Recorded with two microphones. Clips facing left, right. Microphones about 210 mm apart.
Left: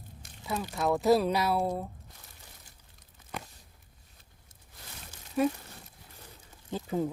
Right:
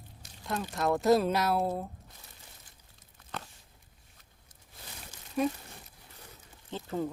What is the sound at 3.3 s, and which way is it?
Walk, 10° left (ahead or behind).